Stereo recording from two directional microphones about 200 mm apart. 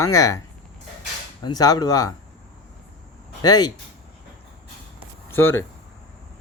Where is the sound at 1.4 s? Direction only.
20° left (ahead or behind).